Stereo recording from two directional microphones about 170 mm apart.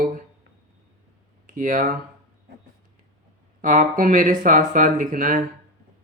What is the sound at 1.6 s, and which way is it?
Speech, 50° right (ahead or behind).